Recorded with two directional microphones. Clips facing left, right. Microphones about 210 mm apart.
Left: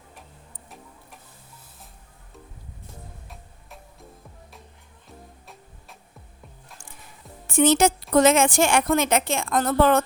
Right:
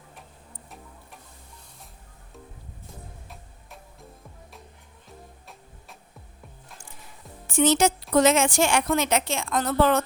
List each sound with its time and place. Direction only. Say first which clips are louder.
5.0 s music: left 1 dB; centre (ahead or behind)
7.4 s a woman's voice: left 2 dB; 50° left (ahead or behind)